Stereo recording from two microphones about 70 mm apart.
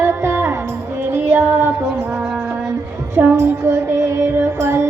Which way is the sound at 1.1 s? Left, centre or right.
Right.